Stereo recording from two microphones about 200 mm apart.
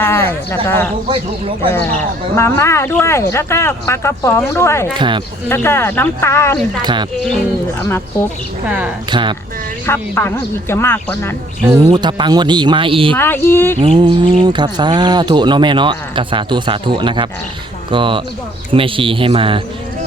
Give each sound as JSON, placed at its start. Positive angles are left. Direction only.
{"t": 0.0, "sound": "speech", "side_deg": 10}
{"t": 1.0, "sound": "speech", "side_deg": -25}
{"t": 2.3, "sound": "speech", "side_deg": 15}
{"t": 4.9, "sound": "speech", "side_deg": -25}
{"t": 5.5, "sound": "speech", "side_deg": 10}
{"t": 6.8, "sound": "speech", "side_deg": -20}
{"t": 8.6, "sound": "speech", "side_deg": -5}
{"t": 9.0, "sound": "speech", "side_deg": -25}
{"t": 9.8, "sound": "speech", "side_deg": 10}
{"t": 11.9, "sound": "speech", "side_deg": -20}
{"t": 13.1, "sound": "speech", "side_deg": 10}
{"t": 13.7, "sound": "speech", "side_deg": -25}